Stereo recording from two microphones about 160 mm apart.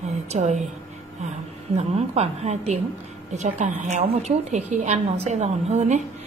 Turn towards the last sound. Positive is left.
turn(degrees=-45)  # may be behind; listen again after turning